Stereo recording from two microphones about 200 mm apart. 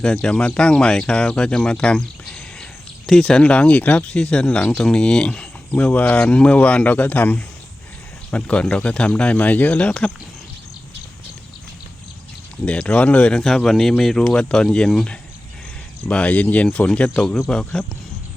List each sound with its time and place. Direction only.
0.0 s speech: 5° left (ahead or behind)
12.6 s speech: 5° left (ahead or behind)